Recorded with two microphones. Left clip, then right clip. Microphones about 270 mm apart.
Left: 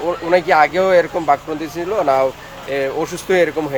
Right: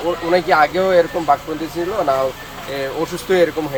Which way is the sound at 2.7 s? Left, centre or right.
Centre.